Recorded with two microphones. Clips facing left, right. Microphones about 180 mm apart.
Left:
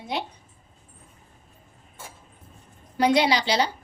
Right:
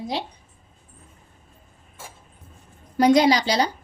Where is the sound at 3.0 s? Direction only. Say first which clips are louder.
Right 4 dB; 45° right (ahead or behind).